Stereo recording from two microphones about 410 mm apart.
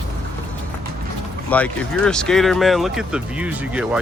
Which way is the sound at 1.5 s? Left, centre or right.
Centre.